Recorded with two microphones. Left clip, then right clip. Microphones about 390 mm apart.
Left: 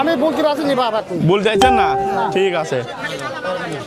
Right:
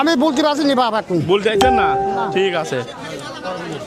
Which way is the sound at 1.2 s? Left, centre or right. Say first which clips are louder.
Left 2 dB; left.